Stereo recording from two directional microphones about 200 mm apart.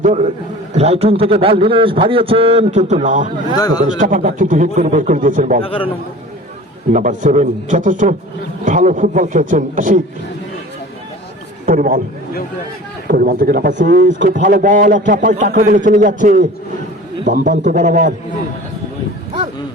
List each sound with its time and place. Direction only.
0.0 s a man's voice: 35° right (ahead or behind)
5.6 s a man's voice: 30° left (ahead or behind)
6.9 s a man's voice: 40° right (ahead or behind)
11.6 s a man's voice: 45° right (ahead or behind)
13.1 s a man's voice: 50° right (ahead or behind)
14.0 s a man's voice: 65° right (ahead or behind)
14.3 s a man's voice: 40° right (ahead or behind)